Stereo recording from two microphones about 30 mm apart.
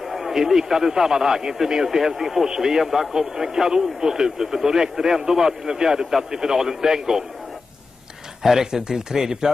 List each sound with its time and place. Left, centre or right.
0.0 s a man's voice: centre
8.4 s a man's voice: centre